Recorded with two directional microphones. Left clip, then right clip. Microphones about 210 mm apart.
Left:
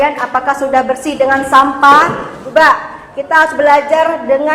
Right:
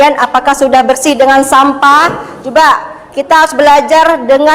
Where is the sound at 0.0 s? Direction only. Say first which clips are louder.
Right 6 dB; 50° right (ahead or behind).